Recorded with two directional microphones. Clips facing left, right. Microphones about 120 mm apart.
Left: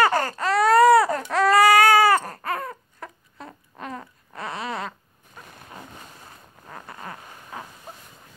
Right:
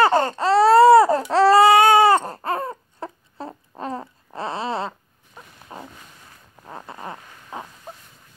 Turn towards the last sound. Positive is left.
turn(degrees=-25)  # may be behind; listen again after turning